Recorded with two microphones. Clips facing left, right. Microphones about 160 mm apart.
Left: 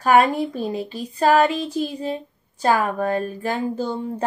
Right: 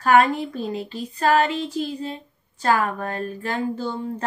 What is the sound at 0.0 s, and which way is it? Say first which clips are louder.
Child singing: left 1 dB; 15° left (ahead or behind).